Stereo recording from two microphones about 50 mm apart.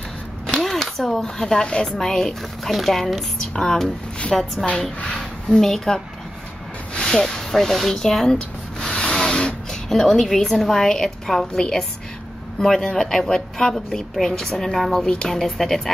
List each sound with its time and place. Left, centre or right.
0.5 s a woman's voice: centre
5.0 s a woman's voice: centre
5.7 s speech: centre
8.8 s rub: centre
9.7 s a woman's voice: centre